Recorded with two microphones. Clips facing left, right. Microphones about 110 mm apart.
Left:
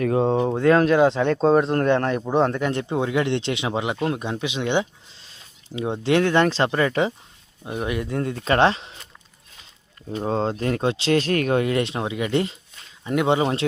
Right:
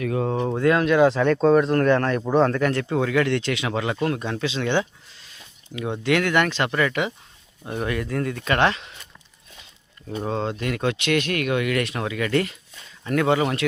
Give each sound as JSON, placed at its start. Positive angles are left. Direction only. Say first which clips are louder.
{"t": 0.0, "sound": "speech", "louder": "left 4 dB", "side_deg": 30}
{"t": 0.7, "sound": "speech", "louder": "left 1 dB", "side_deg": 35}
{"t": 7.6, "sound": "speech", "louder": "even", "side_deg": 15}
{"t": 10.1, "sound": "speech", "louder": "left 2 dB", "side_deg": 35}